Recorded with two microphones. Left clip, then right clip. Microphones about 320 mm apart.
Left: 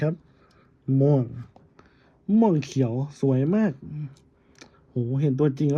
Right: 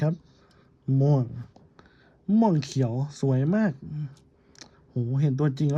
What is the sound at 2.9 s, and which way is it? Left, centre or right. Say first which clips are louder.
Speech: left 4 dB; centre.